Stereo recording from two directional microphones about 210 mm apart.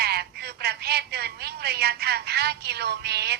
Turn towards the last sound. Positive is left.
turn(degrees=-50)  # may be behind; listen again after turning